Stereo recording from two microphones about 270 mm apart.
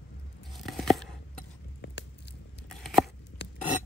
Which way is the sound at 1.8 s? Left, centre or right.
Left.